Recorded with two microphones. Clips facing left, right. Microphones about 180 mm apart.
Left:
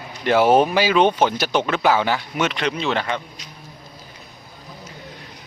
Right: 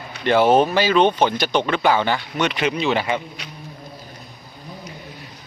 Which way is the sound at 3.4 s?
70° right (ahead or behind).